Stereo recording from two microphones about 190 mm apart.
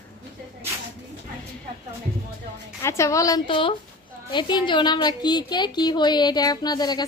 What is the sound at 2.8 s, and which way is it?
A woman's voice, 15° left (ahead or behind).